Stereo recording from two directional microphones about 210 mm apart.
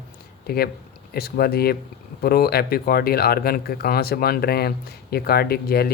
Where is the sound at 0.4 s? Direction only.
50° left (ahead or behind).